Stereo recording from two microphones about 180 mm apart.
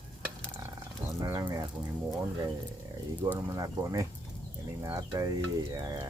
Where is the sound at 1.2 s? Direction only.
15° right (ahead or behind).